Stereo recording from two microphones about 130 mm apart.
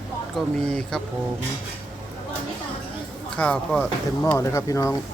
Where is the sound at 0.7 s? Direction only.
5° left (ahead or behind).